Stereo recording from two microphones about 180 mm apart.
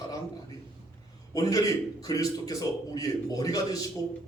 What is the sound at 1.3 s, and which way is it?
A man's voice, 20° left (ahead or behind).